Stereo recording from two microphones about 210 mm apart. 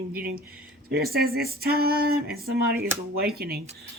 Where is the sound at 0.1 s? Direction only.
45° right (ahead or behind).